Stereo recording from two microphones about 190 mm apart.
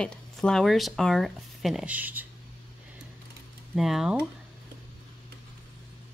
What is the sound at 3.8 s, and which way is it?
Speech, centre (ahead or behind).